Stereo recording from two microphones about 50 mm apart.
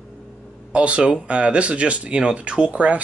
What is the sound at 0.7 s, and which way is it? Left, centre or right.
Speech, right.